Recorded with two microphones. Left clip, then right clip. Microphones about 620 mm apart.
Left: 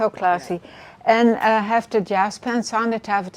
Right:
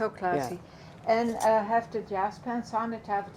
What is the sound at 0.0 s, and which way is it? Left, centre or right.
A woman's voice, left.